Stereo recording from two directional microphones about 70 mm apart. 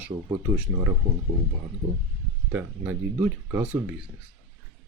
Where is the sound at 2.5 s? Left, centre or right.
Right.